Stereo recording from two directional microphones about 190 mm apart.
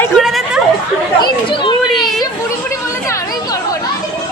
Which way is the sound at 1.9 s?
Centre (ahead or behind).